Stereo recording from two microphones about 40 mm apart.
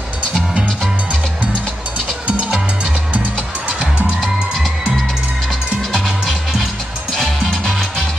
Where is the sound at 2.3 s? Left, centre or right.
Right.